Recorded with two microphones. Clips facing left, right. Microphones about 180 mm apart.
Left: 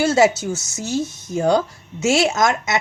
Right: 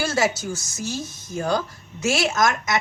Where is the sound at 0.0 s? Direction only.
25° left (ahead or behind).